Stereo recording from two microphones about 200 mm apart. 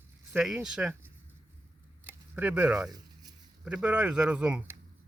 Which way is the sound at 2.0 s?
10° right (ahead or behind).